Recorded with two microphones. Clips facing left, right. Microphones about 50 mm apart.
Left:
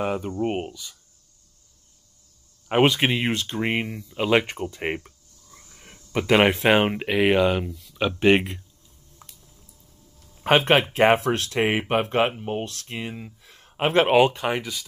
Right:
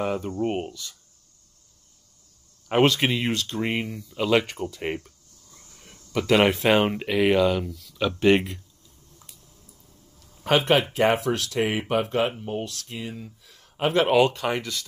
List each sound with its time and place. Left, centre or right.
0.0 s speech: centre
2.7 s speech: centre
9.2 s squish: left
10.4 s speech: left; by 14.9 s centre